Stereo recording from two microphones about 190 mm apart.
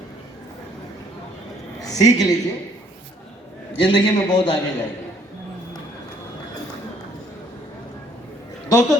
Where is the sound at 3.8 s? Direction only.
25° left (ahead or behind).